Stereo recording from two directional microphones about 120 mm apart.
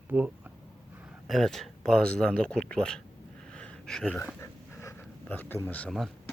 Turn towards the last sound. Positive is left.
turn(degrees=0)  # may be behind; listen again after turning